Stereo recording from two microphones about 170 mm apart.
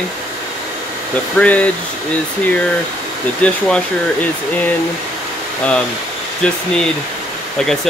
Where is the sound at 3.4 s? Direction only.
5° left (ahead or behind).